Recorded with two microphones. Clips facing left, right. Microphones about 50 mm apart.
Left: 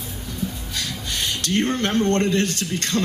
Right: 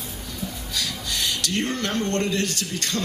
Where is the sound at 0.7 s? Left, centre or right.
Left.